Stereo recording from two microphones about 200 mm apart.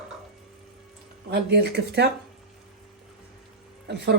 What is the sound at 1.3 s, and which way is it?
Speech, 55° right (ahead or behind).